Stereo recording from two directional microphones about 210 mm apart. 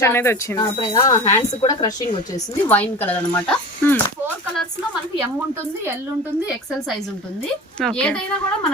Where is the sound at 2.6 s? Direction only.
10° left (ahead or behind).